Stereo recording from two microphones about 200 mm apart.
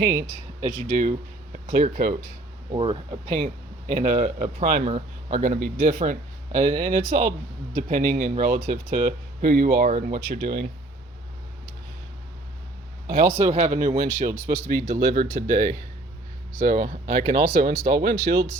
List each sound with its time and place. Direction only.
0.8 s speech: 40° right (ahead or behind)
2.7 s speech: 25° right (ahead or behind)
3.3 s speech: 40° right (ahead or behind)
13.1 s speech: 40° right (ahead or behind)